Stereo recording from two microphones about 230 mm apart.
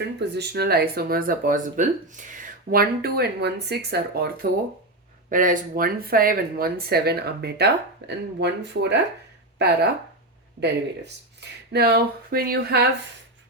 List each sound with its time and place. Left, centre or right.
0.2 s speech: right